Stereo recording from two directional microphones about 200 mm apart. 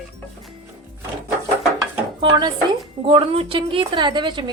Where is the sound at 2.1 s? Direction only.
20° right (ahead or behind).